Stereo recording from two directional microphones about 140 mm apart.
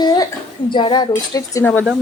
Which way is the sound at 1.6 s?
10° left (ahead or behind).